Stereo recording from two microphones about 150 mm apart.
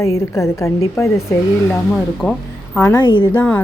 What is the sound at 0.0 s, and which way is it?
A woman's voice, 20° left (ahead or behind).